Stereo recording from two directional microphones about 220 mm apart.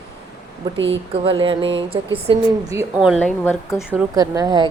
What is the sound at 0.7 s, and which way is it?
Speech, 55° right (ahead or behind).